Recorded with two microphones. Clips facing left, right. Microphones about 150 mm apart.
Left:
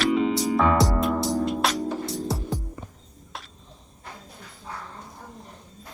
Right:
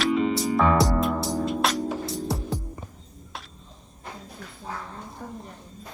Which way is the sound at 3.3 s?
Centre (ahead or behind).